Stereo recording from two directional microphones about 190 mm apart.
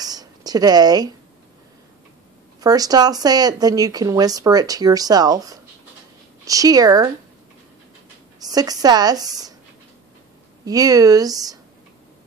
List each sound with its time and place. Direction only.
0.0 s a sound: 20° right (ahead or behind)
2.6 s speech: 20° right (ahead or behind)
8.4 s speech: 20° right (ahead or behind)
10.6 s speech: 20° right (ahead or behind)